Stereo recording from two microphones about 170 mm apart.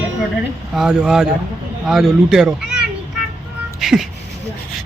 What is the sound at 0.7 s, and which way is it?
Music, 5° right (ahead or behind).